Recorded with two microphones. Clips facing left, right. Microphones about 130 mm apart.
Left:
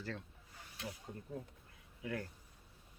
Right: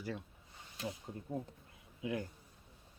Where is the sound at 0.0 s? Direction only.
10° right (ahead or behind).